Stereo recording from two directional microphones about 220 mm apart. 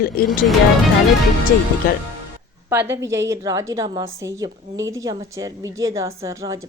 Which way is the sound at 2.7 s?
10° right (ahead or behind).